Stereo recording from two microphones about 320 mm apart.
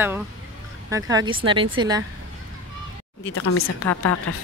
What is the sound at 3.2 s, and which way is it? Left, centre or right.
Speech, left.